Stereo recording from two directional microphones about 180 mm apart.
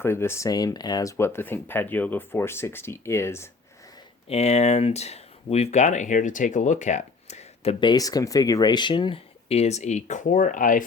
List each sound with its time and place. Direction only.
0.0 s speech: 15° left (ahead or behind)
4.3 s speech: 35° left (ahead or behind)